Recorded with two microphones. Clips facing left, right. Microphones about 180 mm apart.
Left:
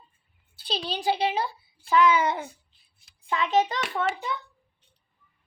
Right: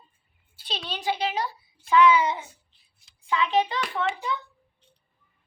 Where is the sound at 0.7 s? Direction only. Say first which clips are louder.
Left 3 dB; 35° left (ahead or behind).